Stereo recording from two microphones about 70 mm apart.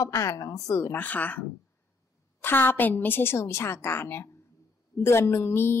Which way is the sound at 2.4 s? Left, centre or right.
Left.